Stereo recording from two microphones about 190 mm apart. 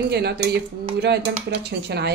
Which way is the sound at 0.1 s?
60° right (ahead or behind).